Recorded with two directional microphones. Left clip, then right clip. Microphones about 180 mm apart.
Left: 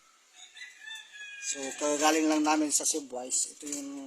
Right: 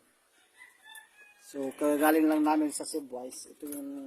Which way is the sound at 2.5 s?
5° right (ahead or behind).